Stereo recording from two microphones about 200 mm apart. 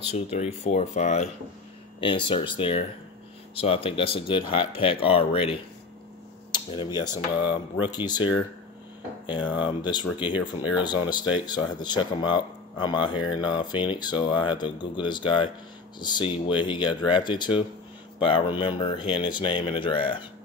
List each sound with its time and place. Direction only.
0.1 s speech: 30° left (ahead or behind)
2.0 s speech: 25° left (ahead or behind)